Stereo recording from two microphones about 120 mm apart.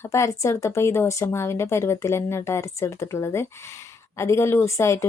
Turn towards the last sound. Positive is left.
turn(degrees=25)  # may be behind; listen again after turning